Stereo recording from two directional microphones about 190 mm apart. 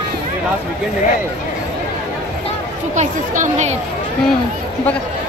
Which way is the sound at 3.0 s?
40° right (ahead or behind).